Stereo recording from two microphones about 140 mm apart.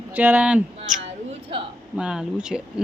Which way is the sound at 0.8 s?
50° right (ahead or behind).